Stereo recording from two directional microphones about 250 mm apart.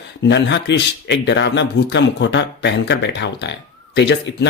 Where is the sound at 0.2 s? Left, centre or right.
Left.